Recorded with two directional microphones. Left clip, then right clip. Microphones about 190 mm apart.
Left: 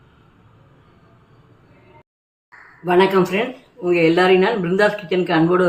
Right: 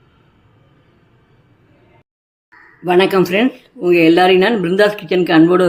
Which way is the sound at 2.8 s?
55° right (ahead or behind).